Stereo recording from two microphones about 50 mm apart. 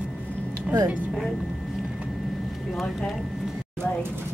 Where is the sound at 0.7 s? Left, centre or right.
Right.